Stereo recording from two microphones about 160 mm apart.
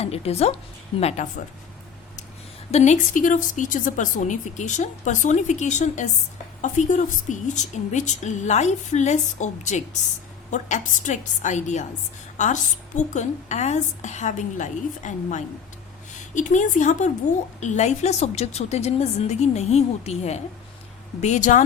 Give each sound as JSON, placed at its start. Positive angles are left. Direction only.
{"t": 0.0, "sound": "a woman's voice", "side_deg": 40}
{"t": 2.7, "sound": "speech", "side_deg": 45}
{"t": 13.0, "sound": "speech", "side_deg": 45}